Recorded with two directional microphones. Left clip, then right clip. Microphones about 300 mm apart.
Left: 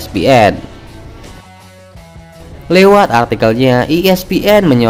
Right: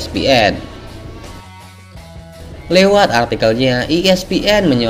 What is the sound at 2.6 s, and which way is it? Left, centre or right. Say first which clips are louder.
A man's voice: left 3 dB; left.